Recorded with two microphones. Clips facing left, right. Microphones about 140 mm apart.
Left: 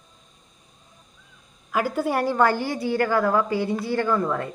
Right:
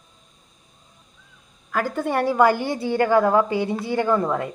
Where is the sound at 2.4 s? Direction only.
15° right (ahead or behind).